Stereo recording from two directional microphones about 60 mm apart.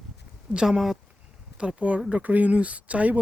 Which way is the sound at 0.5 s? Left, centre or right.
Centre.